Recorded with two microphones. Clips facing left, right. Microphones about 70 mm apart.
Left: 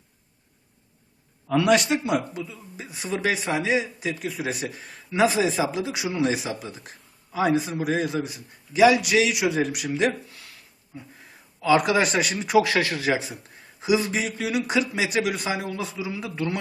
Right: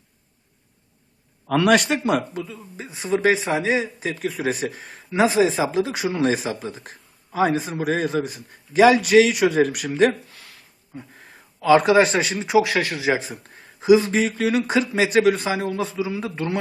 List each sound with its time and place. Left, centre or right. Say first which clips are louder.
1.5 s a man's voice: right 2 dB; right
2.7 s a man's voice: right 6 dB; right
11.6 s speech: right 5 dB; right
12.5 s speech: right 1 dB; centre
13.1 s a man's voice: right 2 dB; right